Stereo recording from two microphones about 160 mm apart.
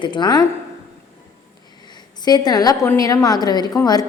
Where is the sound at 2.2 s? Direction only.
25° left (ahead or behind).